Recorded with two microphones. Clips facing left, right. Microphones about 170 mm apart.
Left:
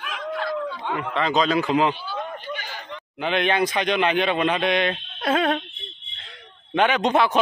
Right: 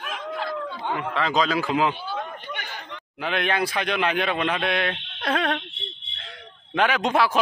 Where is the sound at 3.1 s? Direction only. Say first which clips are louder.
Left 3 dB; centre (ahead or behind).